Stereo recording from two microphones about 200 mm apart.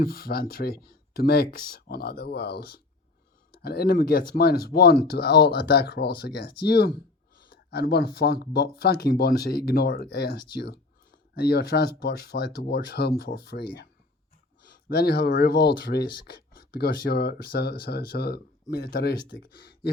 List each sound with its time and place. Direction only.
0.0 s speech: 50° left (ahead or behind)
14.7 s speech: 50° left (ahead or behind)